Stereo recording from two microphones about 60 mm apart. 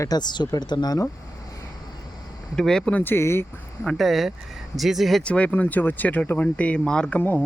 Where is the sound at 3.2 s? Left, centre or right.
Left.